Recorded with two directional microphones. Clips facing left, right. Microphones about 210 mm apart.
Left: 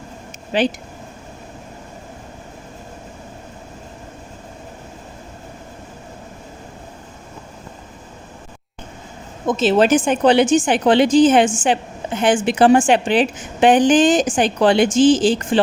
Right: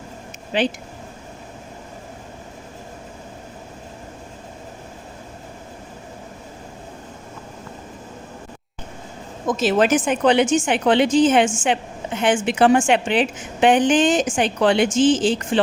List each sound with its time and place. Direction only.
9.5 s speech: 25° left (ahead or behind)